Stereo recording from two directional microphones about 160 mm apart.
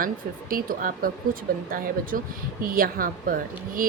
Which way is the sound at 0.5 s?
60° right (ahead or behind).